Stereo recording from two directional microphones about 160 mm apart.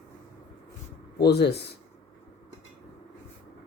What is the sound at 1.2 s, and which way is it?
Speech, 90° left.